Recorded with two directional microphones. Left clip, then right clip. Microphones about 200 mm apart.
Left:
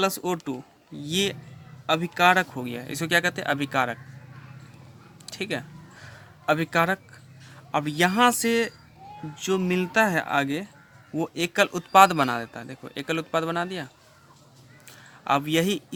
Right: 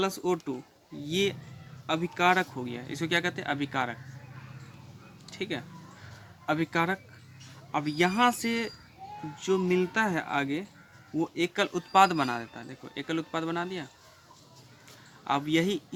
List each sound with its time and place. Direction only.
0.0 s a man's voice: 45° left (ahead or behind)
5.2 s a man's voice: 45° left (ahead or behind)
15.2 s a man's voice: 45° left (ahead or behind)